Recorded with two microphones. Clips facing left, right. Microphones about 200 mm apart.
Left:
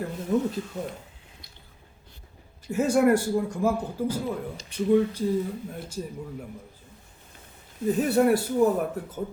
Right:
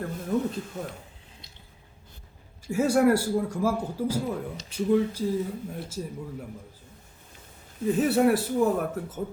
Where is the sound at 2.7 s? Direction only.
10° right (ahead or behind).